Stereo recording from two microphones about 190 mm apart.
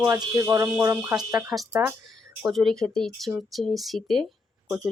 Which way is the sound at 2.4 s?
Centre (ahead or behind).